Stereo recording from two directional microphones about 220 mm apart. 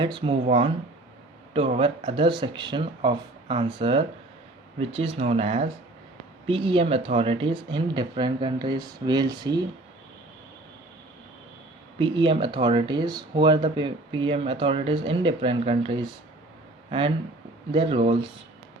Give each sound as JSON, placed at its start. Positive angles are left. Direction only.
{"t": 0.0, "sound": "speech", "side_deg": -20}
{"t": 11.9, "sound": "speech", "side_deg": -20}
{"t": 17.7, "sound": "speech", "side_deg": -25}